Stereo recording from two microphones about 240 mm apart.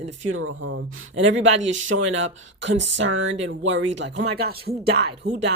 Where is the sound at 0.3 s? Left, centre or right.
Right.